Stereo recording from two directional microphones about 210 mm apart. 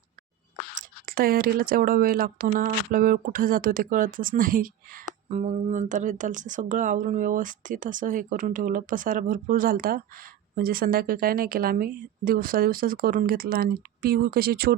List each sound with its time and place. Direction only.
0.8 s a woman's voice: 45° right (ahead or behind)